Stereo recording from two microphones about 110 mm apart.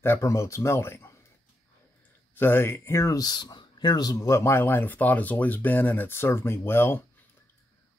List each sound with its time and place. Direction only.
0.0 s speech: 25° left (ahead or behind)
2.3 s speech: 20° left (ahead or behind)